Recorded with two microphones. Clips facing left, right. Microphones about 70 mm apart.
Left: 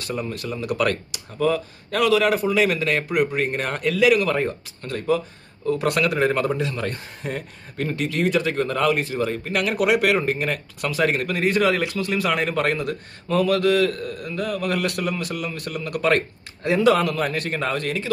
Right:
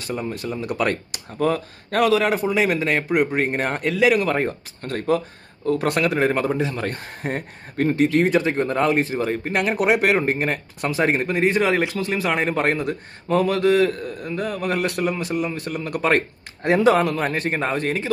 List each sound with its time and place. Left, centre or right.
0.0 s a man's voice: right
1.1 s a man's voice: right